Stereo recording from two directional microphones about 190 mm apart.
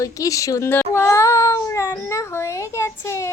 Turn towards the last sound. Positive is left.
turn(degrees=15)  # may be behind; listen again after turning